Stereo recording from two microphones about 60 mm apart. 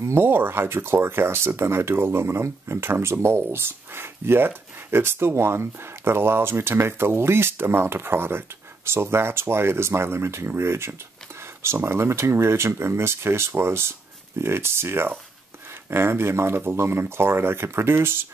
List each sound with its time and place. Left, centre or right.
0.0 s speech: right